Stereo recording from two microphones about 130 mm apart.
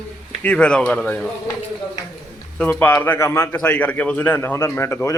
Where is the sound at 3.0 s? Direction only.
15° left (ahead or behind).